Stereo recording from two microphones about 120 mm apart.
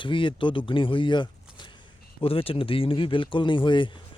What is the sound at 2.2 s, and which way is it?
Speech, 50° left (ahead or behind).